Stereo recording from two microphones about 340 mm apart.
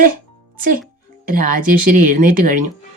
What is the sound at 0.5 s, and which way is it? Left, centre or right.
Speech, right.